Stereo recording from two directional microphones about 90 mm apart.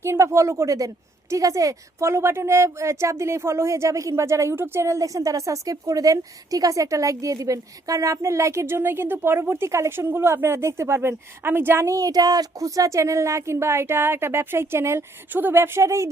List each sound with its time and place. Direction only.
0.0 s a woman's voice: 30° right (ahead or behind)
11.9 s a woman's voice: 45° right (ahead or behind)